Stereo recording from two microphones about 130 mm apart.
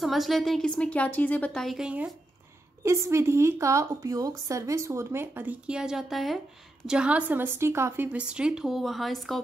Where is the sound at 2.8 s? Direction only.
20° right (ahead or behind).